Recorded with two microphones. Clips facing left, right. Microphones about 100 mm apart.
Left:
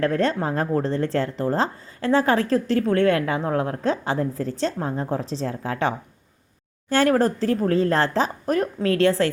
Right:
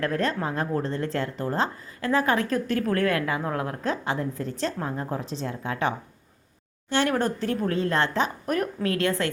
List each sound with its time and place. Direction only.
0.0 s a woman's voice: 30° left (ahead or behind)
6.9 s a woman's voice: 40° left (ahead or behind)